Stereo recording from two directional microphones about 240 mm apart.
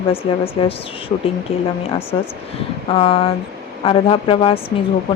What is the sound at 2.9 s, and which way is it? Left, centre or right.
Speech, left.